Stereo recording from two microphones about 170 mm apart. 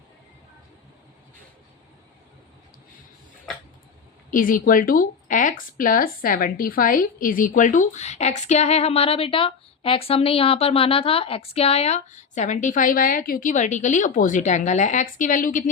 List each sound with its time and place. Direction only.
4.3 s speech: 50° left (ahead or behind)